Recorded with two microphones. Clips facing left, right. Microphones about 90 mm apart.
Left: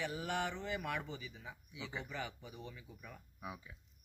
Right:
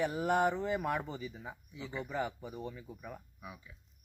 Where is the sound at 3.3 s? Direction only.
20° left (ahead or behind).